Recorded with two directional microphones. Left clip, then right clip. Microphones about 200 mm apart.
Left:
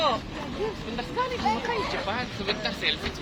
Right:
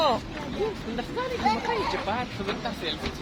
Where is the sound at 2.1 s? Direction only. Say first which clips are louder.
Even; 45° right (ahead or behind).